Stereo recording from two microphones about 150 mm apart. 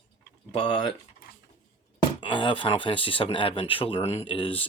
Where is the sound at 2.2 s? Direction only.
35° left (ahead or behind).